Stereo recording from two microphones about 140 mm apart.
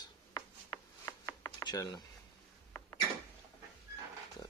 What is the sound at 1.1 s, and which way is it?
Chopping, 25° left (ahead or behind).